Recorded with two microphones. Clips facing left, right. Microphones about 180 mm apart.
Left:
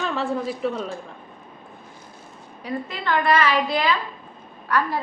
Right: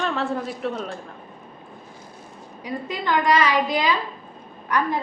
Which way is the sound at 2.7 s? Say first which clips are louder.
Even; 15° right (ahead or behind).